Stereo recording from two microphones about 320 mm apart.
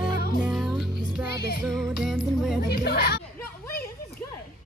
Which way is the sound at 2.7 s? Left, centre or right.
Left.